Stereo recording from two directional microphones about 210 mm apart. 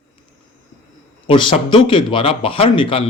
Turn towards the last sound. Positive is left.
turn(degrees=25)  # may be behind; listen again after turning